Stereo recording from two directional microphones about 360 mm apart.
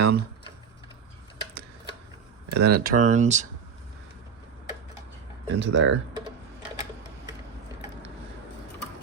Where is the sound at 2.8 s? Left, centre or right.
Right.